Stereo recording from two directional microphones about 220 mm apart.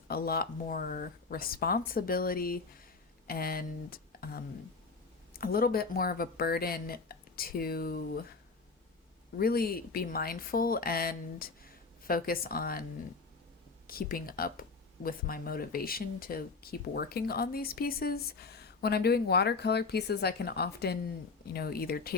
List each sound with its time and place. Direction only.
0.1 s speech: 45° left (ahead or behind)
9.4 s speech: 45° left (ahead or behind)
13.8 s speech: 40° left (ahead or behind)